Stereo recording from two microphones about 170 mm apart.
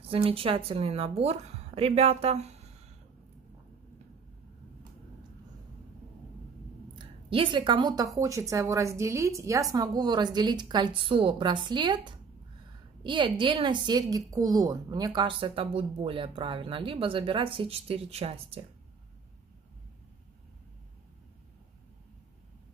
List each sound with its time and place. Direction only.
0.1 s a woman's voice: 35° right (ahead or behind)
7.2 s a woman's voice: 30° right (ahead or behind)